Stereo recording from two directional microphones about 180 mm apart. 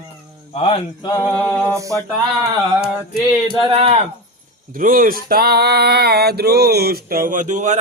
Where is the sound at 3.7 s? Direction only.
30° right (ahead or behind).